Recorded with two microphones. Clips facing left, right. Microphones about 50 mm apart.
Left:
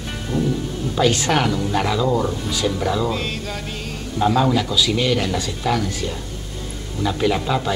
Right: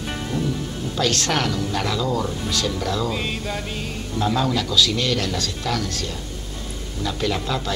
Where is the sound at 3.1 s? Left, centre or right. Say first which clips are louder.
Left 1 dB; centre.